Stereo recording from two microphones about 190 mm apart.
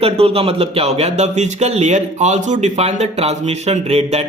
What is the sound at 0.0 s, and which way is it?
A man's voice, 30° right (ahead or behind).